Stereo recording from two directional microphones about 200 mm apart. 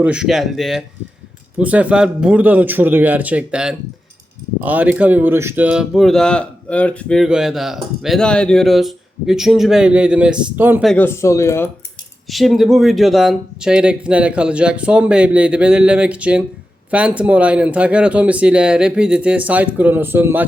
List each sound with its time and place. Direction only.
0.0 s speech: 5° right (ahead or behind)
10.9 s speech: 10° left (ahead or behind)
12.3 s speech: centre (ahead or behind)